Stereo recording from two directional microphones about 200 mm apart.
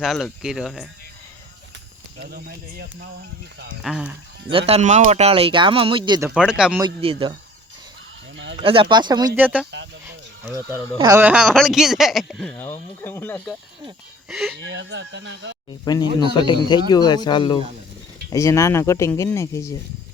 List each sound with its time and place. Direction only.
0.0 s speech: centre (ahead or behind)
2.3 s speech: 50° right (ahead or behind)
3.8 s speech: 5° right (ahead or behind)
4.5 s speech: 30° right (ahead or behind)
6.3 s speech: 5° right (ahead or behind)
6.8 s speech: 25° right (ahead or behind)
8.5 s speech: 25° right (ahead or behind)
9.3 s speech: 10° right (ahead or behind)
14.7 s speech: 65° right (ahead or behind)
15.8 s speech: 20° left (ahead or behind)